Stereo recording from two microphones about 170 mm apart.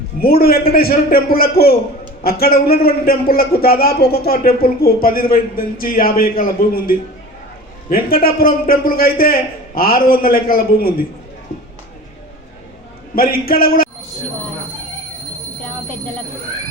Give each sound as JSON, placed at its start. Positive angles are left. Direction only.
{"t": 0.2, "sound": "a man's voice", "side_deg": 65}
{"t": 13.1, "sound": "a man's voice", "side_deg": 60}